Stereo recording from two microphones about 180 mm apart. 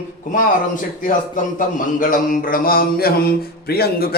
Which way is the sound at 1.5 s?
50° left (ahead or behind).